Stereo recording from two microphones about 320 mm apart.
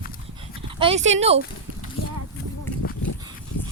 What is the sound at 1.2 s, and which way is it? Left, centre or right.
Speech, centre.